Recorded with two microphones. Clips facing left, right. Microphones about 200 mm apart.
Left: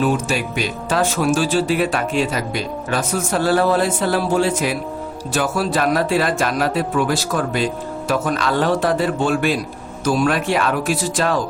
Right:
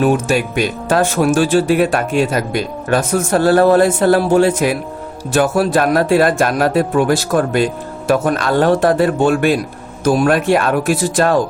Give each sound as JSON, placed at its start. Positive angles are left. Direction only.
{"t": 0.0, "sound": "speech", "side_deg": -55}